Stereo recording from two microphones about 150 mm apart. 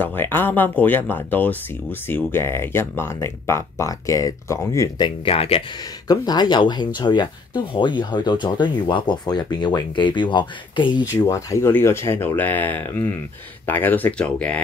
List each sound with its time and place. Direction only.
0.0 s speech: 15° left (ahead or behind); by 5.6 s 40° left (ahead or behind)
6.0 s speech: 30° left (ahead or behind)
11.2 s speech: 20° left (ahead or behind)